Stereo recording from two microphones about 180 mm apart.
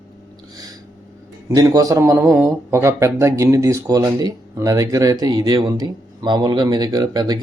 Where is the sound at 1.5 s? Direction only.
20° right (ahead or behind).